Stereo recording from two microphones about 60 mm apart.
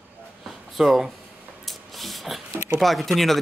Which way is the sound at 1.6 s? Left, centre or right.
Centre.